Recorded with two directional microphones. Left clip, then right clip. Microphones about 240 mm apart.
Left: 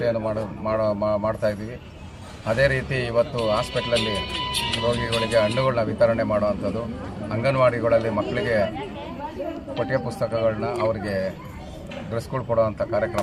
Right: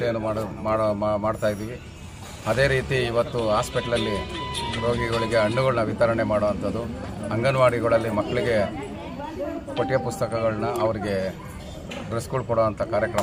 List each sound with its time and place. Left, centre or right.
0.0 s a man's voice: centre
3.9 s speech: left
5.5 s a man's voice: centre
9.7 s a man's voice: centre